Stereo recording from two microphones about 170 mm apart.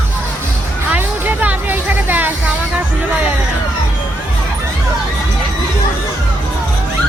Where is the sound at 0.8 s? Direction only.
10° right (ahead or behind).